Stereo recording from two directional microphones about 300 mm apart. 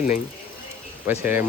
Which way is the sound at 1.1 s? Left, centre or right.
Centre.